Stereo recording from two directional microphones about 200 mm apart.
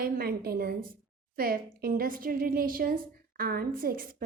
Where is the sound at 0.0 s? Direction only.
50° right (ahead or behind).